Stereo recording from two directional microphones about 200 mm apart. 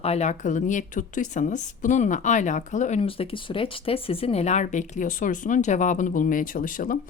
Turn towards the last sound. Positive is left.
turn(degrees=40)  # may be behind; listen again after turning